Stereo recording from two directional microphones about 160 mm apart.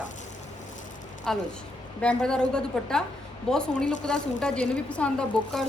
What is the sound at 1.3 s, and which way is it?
A woman's voice, 5° left (ahead or behind).